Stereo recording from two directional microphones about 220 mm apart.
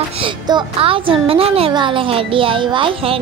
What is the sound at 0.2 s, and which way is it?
Speech, 20° right (ahead or behind).